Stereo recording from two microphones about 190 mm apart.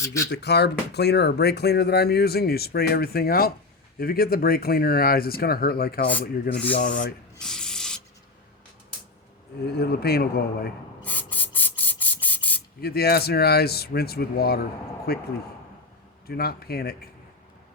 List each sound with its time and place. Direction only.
0.0 s speech: 15° left (ahead or behind)
0.3 s speech: 60° left (ahead or behind)
6.7 s speech: 45° left (ahead or behind)
7.3 s rub: 5° left (ahead or behind)
9.6 s speech: 60° left (ahead or behind)
11.0 s spray: 10° left (ahead or behind)
12.8 s speech: 55° left (ahead or behind)